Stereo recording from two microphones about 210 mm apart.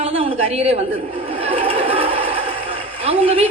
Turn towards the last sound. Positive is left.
turn(degrees=-30)  # may be behind; listen again after turning